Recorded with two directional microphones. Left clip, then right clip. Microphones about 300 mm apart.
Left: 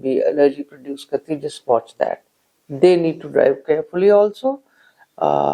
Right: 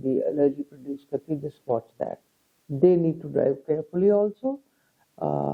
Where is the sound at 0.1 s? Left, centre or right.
Centre.